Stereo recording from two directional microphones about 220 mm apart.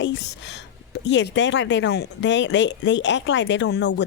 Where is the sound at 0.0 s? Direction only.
55° left (ahead or behind).